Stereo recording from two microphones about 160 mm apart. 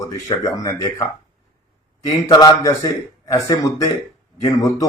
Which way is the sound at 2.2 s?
20° left (ahead or behind).